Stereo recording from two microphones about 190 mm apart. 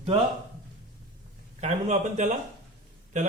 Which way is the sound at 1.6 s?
40° right (ahead or behind).